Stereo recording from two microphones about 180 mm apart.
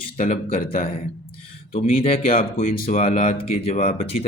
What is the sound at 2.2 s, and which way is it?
Speech, 50° left (ahead or behind).